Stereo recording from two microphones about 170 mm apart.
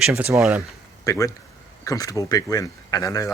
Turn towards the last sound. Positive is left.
turn(degrees=20)  # may be behind; listen again after turning